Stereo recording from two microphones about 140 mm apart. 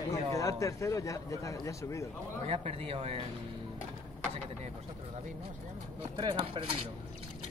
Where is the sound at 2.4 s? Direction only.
45° right (ahead or behind).